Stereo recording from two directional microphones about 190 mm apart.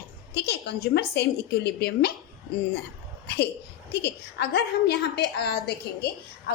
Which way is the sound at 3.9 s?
60° left (ahead or behind).